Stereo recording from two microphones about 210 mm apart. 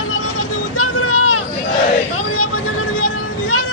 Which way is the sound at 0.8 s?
90° left.